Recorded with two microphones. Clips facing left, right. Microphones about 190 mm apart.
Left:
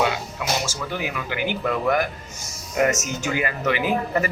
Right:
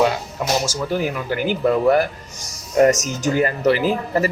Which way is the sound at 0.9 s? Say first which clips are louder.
Right 6 dB; 40° right (ahead or behind).